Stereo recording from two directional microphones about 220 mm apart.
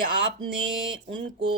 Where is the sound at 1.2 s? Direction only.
25° right (ahead or behind).